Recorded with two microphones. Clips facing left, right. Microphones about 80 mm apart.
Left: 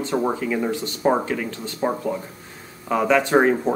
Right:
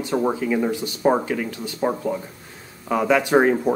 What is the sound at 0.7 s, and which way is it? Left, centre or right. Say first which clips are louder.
Speech: even; centre.